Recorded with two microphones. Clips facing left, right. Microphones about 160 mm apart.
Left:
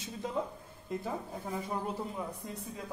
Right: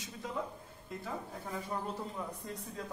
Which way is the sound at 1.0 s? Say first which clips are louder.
Left 3 dB; 15° left (ahead or behind).